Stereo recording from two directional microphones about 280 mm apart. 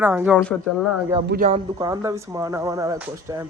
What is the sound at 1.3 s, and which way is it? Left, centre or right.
Speech, right.